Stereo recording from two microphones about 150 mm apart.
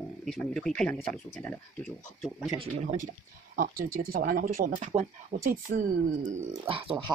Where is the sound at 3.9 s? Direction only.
75° right (ahead or behind).